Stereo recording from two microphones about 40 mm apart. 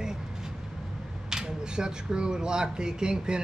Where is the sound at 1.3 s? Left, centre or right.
Centre.